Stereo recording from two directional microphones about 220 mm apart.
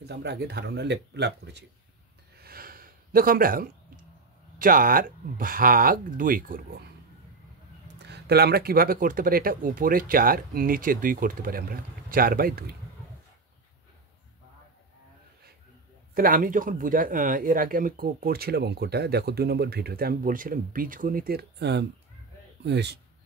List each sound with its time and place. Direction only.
0.1 s speech: 50° right (ahead or behind)
2.3 s gasp: 45° right (ahead or behind)
4.6 s speech: 40° right (ahead or behind)
8.0 s speech: 50° right (ahead or behind)
16.2 s speech: 40° right (ahead or behind)